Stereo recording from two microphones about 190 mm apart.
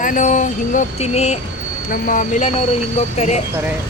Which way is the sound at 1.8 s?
45° left (ahead or behind).